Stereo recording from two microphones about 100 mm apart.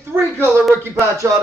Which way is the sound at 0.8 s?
25° right (ahead or behind).